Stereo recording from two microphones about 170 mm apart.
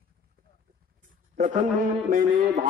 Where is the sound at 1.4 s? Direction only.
45° right (ahead or behind).